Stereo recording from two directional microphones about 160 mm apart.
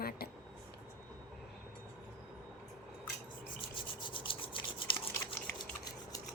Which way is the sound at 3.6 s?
30° left (ahead or behind).